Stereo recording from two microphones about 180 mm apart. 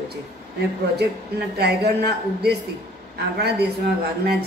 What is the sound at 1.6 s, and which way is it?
Speech, 65° right (ahead or behind).